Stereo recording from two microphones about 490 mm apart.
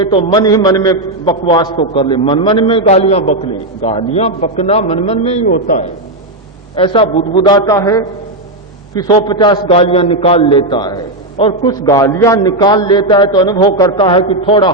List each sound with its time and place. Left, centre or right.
0.0 s a man's voice: centre